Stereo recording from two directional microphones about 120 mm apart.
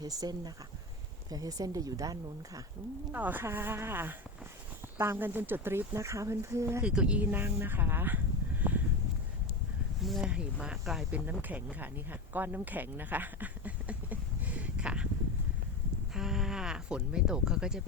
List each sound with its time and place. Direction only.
0.0 s speech: 30° right (ahead or behind)
3.1 s speech: 15° right (ahead or behind)
6.8 s speech: 10° right (ahead or behind)
10.0 s speech: centre (ahead or behind)
11.1 s speech: 15° right (ahead or behind)
12.3 s a sound: 15° right (ahead or behind)
16.1 s a sound: 5° right (ahead or behind)